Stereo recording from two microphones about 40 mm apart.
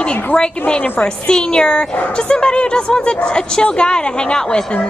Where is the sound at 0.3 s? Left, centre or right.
Left.